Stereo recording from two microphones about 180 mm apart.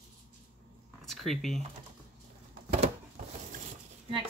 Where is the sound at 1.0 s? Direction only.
Centre (ahead or behind).